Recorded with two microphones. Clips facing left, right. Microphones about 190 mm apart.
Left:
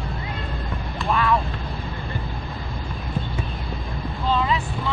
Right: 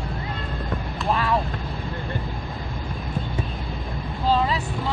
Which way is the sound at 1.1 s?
30° right (ahead or behind).